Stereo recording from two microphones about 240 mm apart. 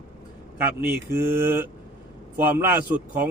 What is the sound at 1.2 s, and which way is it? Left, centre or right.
A man's voice, centre.